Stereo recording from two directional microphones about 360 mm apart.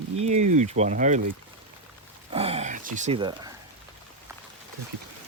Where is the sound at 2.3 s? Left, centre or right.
Centre.